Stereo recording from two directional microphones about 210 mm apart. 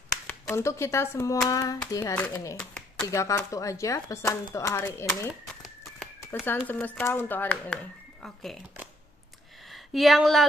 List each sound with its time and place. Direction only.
0.3 s speech: 15° left (ahead or behind)
5.3 s crumpling: centre (ahead or behind)
6.4 s speech: 10° left (ahead or behind)
9.6 s speech: centre (ahead or behind)